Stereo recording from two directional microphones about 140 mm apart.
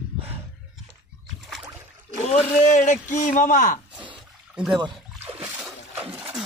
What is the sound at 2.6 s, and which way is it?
Speech, 60° left (ahead or behind).